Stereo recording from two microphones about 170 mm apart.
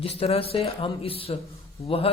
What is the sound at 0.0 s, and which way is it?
Speech, 35° left (ahead or behind).